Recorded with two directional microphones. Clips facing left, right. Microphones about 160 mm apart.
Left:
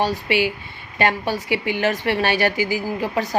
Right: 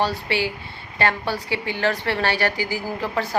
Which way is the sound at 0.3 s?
15° left (ahead or behind).